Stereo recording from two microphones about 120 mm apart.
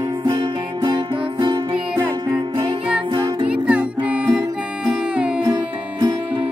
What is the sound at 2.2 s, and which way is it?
Music, 30° right (ahead or behind).